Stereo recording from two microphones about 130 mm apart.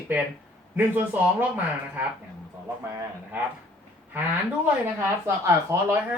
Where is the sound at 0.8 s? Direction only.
15° right (ahead or behind).